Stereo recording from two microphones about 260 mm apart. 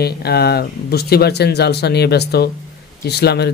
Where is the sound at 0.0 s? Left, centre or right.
Left.